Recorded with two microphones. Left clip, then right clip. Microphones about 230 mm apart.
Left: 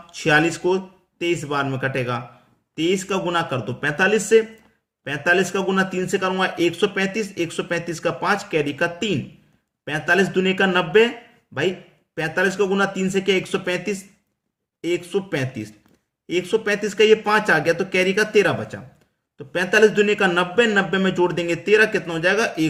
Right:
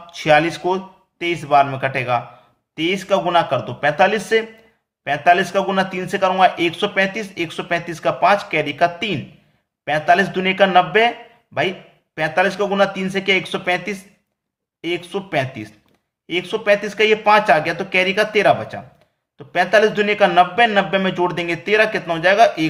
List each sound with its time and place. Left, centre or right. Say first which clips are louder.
0.1 s a man's voice: right 3 dB; centre
12.1 s a man's voice: right 3 dB; centre